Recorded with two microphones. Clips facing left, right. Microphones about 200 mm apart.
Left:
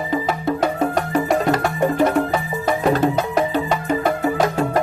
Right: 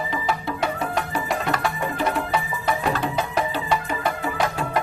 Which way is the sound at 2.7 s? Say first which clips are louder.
Left 7 dB; 45° left (ahead or behind).